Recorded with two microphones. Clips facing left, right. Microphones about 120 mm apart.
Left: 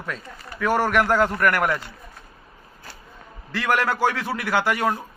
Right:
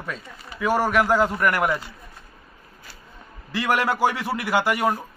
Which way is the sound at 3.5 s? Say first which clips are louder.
Even; 10° right (ahead or behind).